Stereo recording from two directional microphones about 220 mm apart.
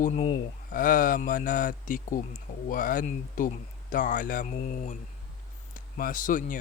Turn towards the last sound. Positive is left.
turn(degrees=35)  # may be behind; listen again after turning